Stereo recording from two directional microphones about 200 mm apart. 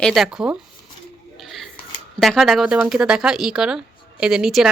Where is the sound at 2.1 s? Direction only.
Centre (ahead or behind).